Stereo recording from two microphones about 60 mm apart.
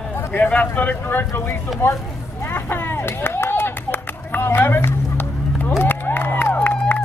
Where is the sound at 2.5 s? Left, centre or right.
Left.